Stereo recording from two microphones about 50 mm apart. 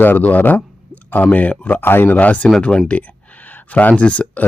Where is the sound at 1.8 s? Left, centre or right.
Left.